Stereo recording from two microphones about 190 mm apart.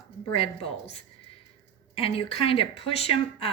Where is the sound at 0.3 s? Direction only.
30° left (ahead or behind).